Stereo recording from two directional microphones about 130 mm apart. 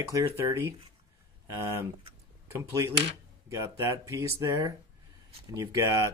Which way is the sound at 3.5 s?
25° right (ahead or behind).